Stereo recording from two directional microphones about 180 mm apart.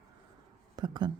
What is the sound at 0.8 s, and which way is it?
Speech, 25° right (ahead or behind).